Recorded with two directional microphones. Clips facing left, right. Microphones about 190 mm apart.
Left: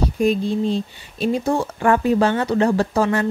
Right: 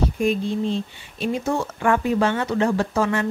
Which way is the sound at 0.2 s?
35° left (ahead or behind).